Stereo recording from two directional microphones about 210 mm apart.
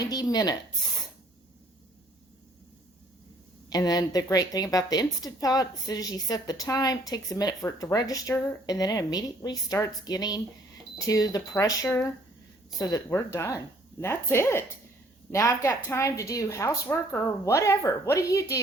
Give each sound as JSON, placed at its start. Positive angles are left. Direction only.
{"t": 0.0, "sound": "speech", "side_deg": 15}
{"t": 3.7, "sound": "speech", "side_deg": 15}